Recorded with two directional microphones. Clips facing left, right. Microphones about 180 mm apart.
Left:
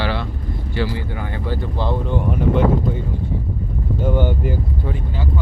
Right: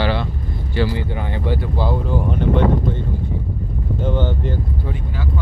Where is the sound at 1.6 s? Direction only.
5° right (ahead or behind).